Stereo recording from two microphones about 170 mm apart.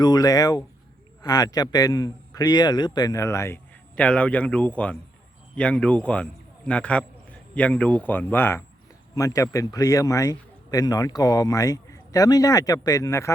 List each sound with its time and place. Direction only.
0.0 s a man's voice: 25° left (ahead or behind)